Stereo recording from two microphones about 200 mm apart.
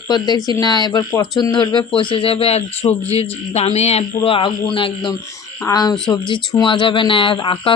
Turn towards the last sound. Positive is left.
turn(degrees=25)  # may be behind; listen again after turning